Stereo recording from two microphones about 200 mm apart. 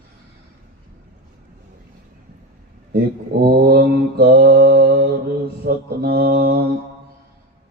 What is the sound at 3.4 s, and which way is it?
Mantra, 50° right (ahead or behind).